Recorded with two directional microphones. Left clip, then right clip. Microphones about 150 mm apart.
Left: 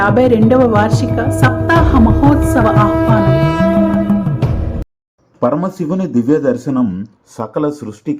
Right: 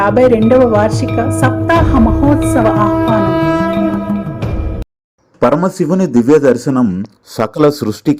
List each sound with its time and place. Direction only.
0.0 s speech: centre (ahead or behind)
5.5 s a man's voice: 20° right (ahead or behind)
7.5 s speech: 35° right (ahead or behind)